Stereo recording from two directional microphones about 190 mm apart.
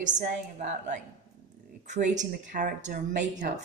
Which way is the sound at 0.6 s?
40° right (ahead or behind).